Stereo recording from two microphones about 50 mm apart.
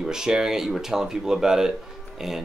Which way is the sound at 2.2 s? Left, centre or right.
Centre.